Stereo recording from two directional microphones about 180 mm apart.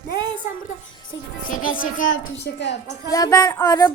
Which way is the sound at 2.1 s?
75° left (ahead or behind).